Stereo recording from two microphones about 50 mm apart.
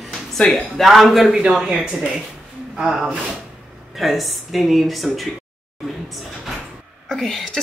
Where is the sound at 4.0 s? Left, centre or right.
Centre.